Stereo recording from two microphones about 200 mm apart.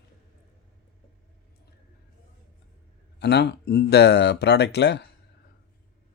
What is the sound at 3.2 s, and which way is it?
Speech, 55° left (ahead or behind).